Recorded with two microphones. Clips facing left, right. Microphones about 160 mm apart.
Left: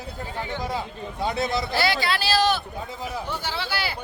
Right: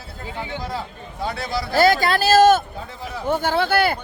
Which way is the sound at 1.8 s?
45° right (ahead or behind).